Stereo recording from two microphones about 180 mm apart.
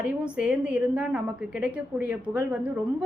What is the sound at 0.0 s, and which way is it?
Speech, 5° right (ahead or behind).